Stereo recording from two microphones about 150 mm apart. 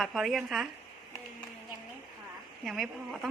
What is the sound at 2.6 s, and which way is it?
Speech, centre (ahead or behind).